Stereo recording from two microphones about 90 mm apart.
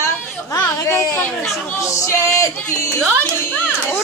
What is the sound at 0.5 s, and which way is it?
Speech, 25° left (ahead or behind).